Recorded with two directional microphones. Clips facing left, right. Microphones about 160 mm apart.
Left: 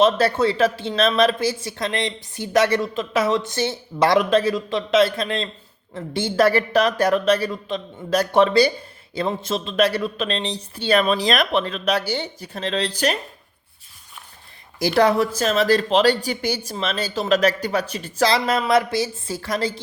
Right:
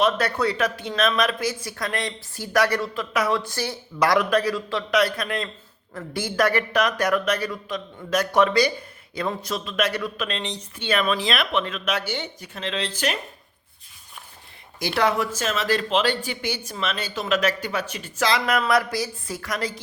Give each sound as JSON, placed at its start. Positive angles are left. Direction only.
{"t": 0.0, "sound": "speech", "side_deg": 30}
{"t": 14.8, "sound": "speech", "side_deg": 35}